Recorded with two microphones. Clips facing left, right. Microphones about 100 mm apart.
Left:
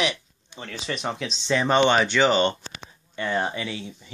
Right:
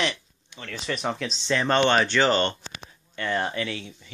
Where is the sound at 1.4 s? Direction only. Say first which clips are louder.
Left 2 dB; 10° left (ahead or behind).